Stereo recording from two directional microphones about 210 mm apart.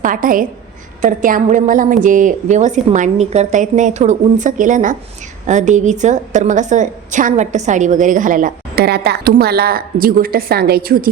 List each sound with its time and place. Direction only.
0.0 s a woman's voice: 40° right (ahead or behind)